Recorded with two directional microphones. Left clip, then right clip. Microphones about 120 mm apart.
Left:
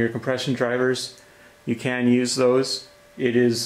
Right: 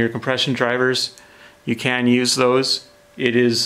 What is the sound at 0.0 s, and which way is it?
Speech, 50° right (ahead or behind).